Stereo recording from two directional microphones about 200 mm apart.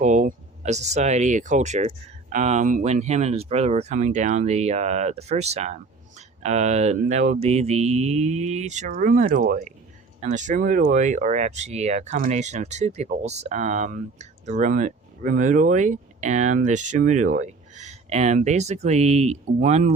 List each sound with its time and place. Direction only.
0.0 s speech: 40° right (ahead or behind)